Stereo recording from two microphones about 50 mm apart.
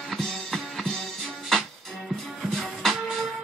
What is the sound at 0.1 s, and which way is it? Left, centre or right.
Music, centre.